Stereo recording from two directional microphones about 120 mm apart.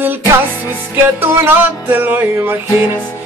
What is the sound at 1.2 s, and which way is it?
Music, 20° right (ahead or behind).